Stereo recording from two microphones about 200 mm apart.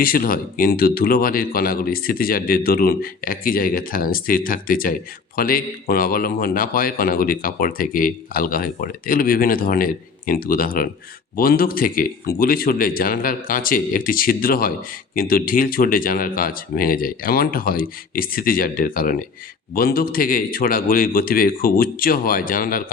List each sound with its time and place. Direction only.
0.0 s a man's voice: 45° left (ahead or behind)